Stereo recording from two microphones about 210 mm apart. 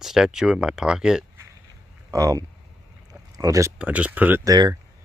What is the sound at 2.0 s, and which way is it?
Speech, 15° right (ahead or behind).